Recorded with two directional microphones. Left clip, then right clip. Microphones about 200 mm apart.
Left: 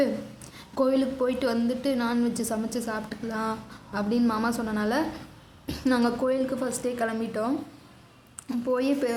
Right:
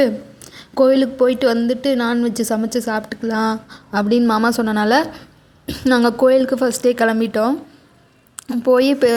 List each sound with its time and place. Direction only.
0.0 s a woman's voice: 35° right (ahead or behind)